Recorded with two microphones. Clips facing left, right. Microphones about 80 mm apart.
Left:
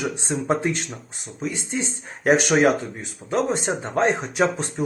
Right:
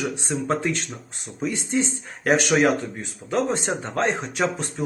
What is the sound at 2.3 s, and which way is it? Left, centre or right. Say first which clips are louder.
Speech: left 2 dB; left.